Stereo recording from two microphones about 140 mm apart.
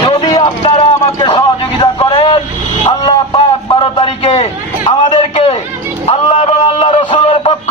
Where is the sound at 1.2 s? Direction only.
35° left (ahead or behind).